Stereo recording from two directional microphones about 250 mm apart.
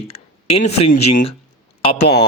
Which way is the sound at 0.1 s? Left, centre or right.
Left.